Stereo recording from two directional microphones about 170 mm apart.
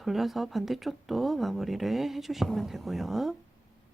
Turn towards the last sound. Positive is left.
turn(degrees=0)  # may be behind; listen again after turning